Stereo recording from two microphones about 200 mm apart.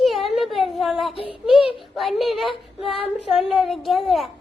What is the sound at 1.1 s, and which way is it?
Child singing, 30° left (ahead or behind).